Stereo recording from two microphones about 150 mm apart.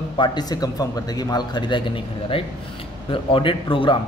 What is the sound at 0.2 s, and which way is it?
A man's voice, 30° left (ahead or behind).